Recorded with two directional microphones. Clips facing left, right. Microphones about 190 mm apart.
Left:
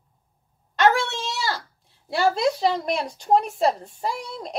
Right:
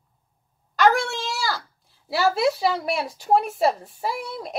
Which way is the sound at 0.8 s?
Centre (ahead or behind).